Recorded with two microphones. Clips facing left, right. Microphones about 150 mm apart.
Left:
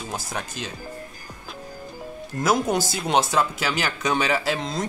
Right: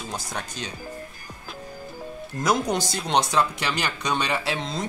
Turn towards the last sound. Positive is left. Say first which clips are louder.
# left 2 dB
turn(degrees=0)  # may be behind; listen again after turning